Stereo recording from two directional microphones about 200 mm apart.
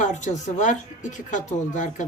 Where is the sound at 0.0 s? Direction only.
35° left (ahead or behind).